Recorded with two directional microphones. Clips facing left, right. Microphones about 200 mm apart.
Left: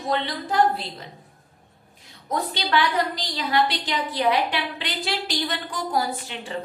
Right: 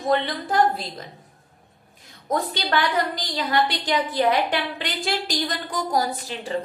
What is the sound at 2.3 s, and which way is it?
A woman's voice, 50° right (ahead or behind).